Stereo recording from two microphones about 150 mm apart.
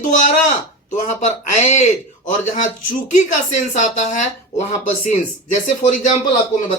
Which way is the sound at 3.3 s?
55° left (ahead or behind).